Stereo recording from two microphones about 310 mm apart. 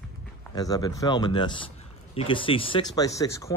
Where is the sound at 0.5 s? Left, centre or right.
Centre.